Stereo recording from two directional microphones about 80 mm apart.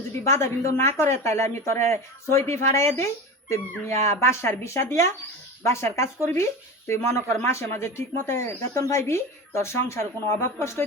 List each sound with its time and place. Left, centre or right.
0.3 s speech: left